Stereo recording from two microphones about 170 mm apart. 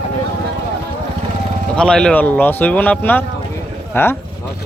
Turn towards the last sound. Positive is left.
turn(degrees=15)  # may be behind; listen again after turning